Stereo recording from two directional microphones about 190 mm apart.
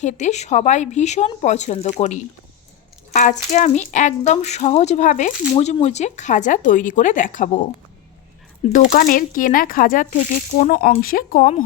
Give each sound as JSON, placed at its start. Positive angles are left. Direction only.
{"t": 0.0, "sound": "speech", "side_deg": 40}
{"t": 8.7, "sound": "speech", "side_deg": 45}